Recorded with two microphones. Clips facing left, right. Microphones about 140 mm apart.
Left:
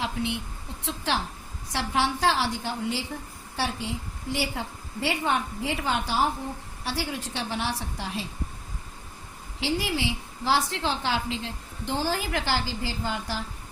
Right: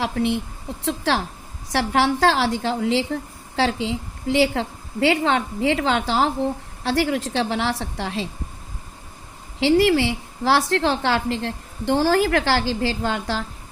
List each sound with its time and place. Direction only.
0.0 s a woman's voice: 80° right
0.9 s a woman's voice: 90° right
9.6 s a woman's voice: 90° right